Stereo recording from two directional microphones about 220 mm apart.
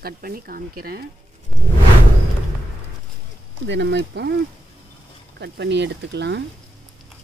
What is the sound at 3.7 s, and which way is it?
Speech, 50° right (ahead or behind).